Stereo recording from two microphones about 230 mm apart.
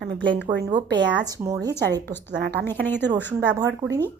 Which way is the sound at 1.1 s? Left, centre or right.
Centre.